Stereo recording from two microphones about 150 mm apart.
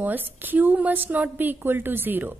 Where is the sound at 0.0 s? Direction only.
10° right (ahead or behind).